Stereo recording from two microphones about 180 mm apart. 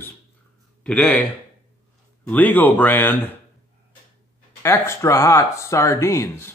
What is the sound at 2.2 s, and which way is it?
Speech, 10° left (ahead or behind).